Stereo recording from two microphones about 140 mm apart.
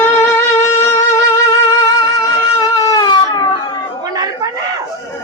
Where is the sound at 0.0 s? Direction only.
20° left (ahead or behind).